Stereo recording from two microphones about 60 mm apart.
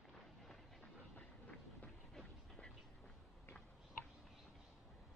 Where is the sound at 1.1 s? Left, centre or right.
Left.